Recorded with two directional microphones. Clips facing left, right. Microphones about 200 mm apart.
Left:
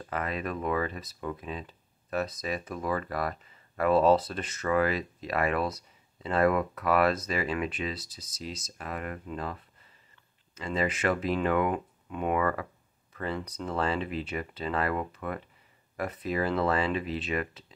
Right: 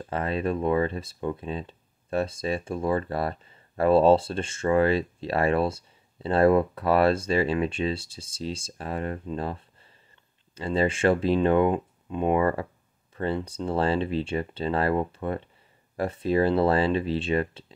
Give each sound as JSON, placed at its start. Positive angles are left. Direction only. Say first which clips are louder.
{"t": 0.0, "sound": "speech", "louder": "right 5 dB", "side_deg": -30}